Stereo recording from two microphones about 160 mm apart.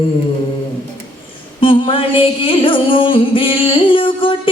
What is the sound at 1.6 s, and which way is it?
Music, 35° left (ahead or behind).